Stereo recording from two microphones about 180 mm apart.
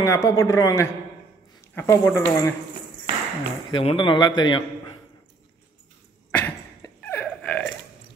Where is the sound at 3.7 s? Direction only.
30° left (ahead or behind).